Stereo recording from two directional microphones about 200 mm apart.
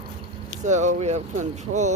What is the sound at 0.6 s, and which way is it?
Speech, 35° right (ahead or behind).